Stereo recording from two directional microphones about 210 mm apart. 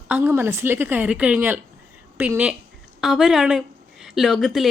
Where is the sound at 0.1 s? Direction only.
10° right (ahead or behind).